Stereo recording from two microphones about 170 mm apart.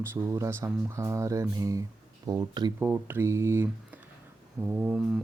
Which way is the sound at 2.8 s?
10° right (ahead or behind).